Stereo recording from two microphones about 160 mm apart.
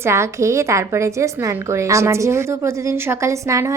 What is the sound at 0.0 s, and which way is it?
A woman's voice, 15° right (ahead or behind).